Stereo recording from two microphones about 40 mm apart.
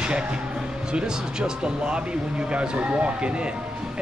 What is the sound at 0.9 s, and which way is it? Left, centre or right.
Speech, right.